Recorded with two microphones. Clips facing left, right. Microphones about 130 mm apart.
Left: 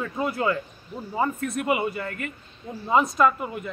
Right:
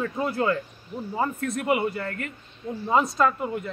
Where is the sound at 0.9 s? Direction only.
15° right (ahead or behind).